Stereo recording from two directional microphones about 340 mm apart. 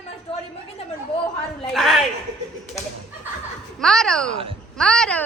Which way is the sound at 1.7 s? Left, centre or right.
Centre.